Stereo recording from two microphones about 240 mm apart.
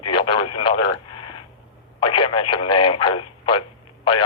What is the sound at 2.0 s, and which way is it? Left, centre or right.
Speech, left.